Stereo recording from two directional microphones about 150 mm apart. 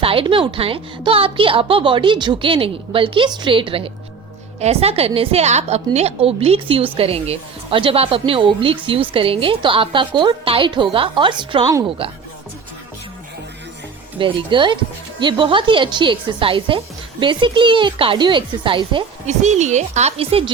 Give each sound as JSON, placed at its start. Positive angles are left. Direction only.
{"t": 0.0, "sound": "a woman's voice", "side_deg": -35}
{"t": 14.2, "sound": "a woman's voice", "side_deg": -35}
{"t": 19.2, "sound": "speech", "side_deg": -50}